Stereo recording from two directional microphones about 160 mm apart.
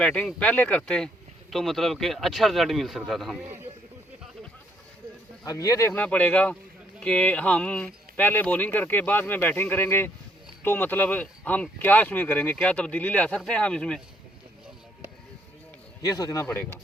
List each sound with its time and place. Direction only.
0.0 s speech: 5° left (ahead or behind)
5.5 s speech: 20° left (ahead or behind); by 14.0 s 5° left (ahead or behind)
16.0 s a man's voice: 25° left (ahead or behind)